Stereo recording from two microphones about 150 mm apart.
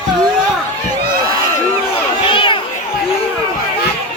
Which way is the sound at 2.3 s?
35° left (ahead or behind).